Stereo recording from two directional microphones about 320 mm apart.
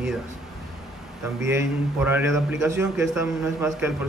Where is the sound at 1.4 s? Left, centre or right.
Centre.